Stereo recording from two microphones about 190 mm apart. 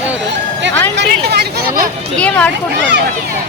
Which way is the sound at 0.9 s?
60° right (ahead or behind).